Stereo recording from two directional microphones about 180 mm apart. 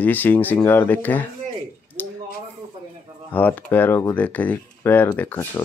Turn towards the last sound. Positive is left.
turn(degrees=10)  # may be behind; listen again after turning